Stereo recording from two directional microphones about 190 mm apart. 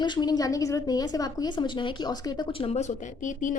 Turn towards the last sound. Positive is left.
turn(degrees=40)  # may be behind; listen again after turning